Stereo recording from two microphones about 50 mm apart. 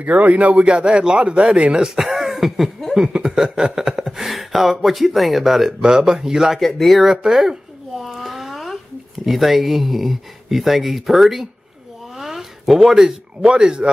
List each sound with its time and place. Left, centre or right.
0.0 s speech: right
2.0 s cough: centre
3.0 s speech: centre
5.8 s speech: centre
6.6 s speech: centre
7.1 s a sound: centre
9.2 s speech: centre